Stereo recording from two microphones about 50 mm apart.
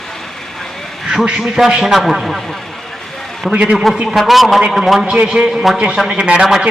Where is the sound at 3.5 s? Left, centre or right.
Right.